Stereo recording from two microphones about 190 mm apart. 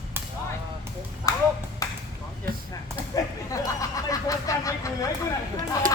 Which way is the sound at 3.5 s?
20° left (ahead or behind).